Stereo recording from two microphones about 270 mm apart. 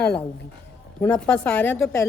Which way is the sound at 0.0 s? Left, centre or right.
Centre.